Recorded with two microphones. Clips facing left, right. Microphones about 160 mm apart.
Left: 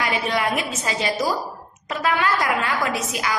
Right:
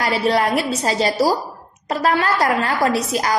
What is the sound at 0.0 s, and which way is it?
A woman's voice, 35° right (ahead or behind).